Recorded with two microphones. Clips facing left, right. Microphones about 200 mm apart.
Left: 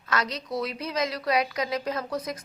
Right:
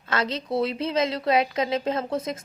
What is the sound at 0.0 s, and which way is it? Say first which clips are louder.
A woman's voice: right 3 dB; 25° right (ahead or behind).